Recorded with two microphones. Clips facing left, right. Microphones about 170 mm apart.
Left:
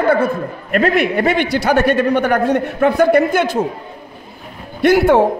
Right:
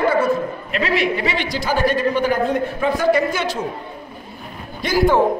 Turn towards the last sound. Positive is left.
turn(degrees=70)  # may be behind; listen again after turning